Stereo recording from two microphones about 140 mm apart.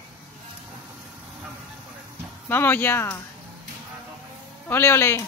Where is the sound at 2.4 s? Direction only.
15° left (ahead or behind).